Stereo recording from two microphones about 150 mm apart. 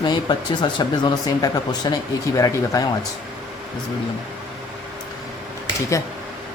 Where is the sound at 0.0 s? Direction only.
30° left (ahead or behind).